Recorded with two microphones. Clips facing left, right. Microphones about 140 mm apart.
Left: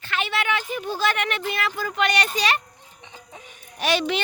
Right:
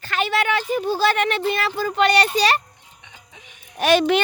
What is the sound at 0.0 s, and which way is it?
Speech, 40° right (ahead or behind).